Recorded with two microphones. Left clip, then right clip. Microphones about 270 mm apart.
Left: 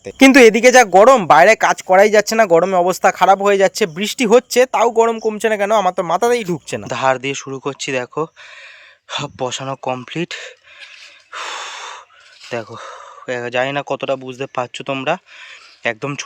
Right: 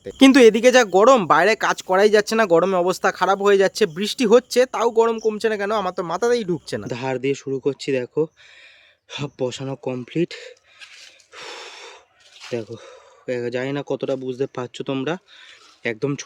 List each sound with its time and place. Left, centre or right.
0.0 s speech: centre
6.8 s speech: centre
11.3 s gasp: centre
12.5 s speech: centre